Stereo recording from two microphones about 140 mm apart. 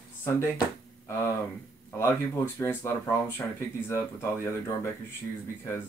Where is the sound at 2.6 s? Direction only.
15° left (ahead or behind).